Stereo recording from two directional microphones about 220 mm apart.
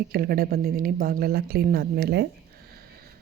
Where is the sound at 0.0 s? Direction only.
45° right (ahead or behind).